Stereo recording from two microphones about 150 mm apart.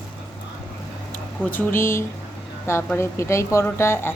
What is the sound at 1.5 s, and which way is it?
A woman's voice, 10° left (ahead or behind).